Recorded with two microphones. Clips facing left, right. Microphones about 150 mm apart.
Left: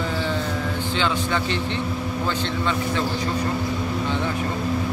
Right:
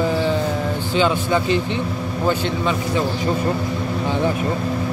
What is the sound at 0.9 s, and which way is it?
Speech, 10° right (ahead or behind).